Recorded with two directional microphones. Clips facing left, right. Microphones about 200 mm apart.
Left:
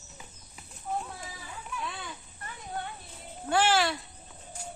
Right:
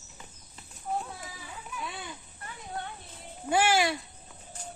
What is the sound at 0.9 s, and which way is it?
Children playing, 5° right (ahead or behind).